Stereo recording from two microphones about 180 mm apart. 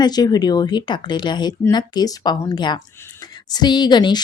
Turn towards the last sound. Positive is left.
turn(degrees=25)  # may be behind; listen again after turning